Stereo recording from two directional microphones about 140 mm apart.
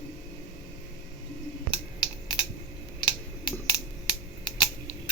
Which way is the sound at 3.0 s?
30° left (ahead or behind).